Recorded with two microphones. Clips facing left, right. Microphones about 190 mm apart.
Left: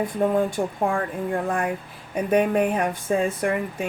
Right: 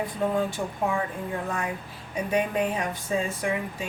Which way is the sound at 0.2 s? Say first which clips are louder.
Left 4 dB; 60° left (ahead or behind).